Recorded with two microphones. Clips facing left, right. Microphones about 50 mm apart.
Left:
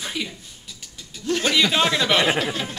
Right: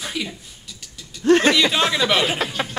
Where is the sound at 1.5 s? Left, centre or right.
Centre.